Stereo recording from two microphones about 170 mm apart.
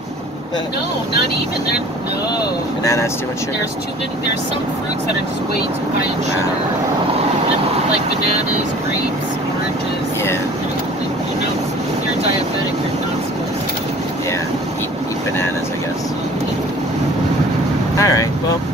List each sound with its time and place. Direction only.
2.8 s speech: 20° left (ahead or behind)
17.9 s speech: 20° left (ahead or behind)